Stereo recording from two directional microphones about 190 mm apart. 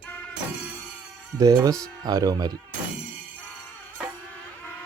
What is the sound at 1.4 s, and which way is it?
Speech, 20° right (ahead or behind).